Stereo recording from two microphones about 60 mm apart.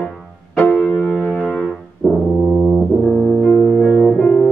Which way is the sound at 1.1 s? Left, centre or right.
Centre.